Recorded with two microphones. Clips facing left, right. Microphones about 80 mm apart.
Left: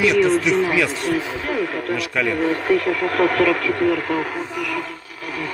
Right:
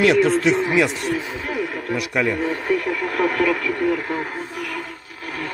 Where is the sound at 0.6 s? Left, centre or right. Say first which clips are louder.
Even; right.